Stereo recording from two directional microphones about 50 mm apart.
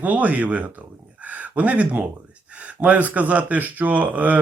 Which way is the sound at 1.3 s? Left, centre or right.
Right.